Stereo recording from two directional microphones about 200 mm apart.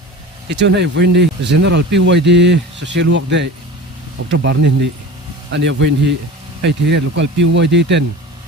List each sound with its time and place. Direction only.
0.5 s speech: 60° right (ahead or behind)